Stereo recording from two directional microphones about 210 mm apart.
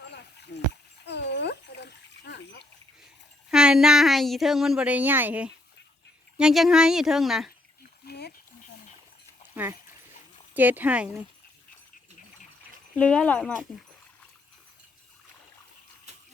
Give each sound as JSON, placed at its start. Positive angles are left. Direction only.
{"t": 0.1, "sound": "a sound", "side_deg": 55}
{"t": 1.0, "sound": "splash", "side_deg": 55}
{"t": 3.5, "sound": "speech", "side_deg": -5}
{"t": 8.0, "sound": "a sound", "side_deg": 50}
{"t": 10.5, "sound": "speech", "side_deg": -10}
{"t": 13.0, "sound": "speech", "side_deg": 5}